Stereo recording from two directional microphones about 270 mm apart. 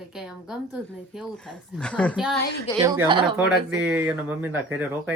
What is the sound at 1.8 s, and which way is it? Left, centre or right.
Speech, centre.